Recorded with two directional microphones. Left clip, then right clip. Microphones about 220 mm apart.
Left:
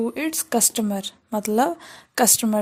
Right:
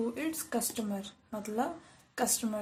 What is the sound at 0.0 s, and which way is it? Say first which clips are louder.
A woman's voice: left 9 dB; 45° left (ahead or behind).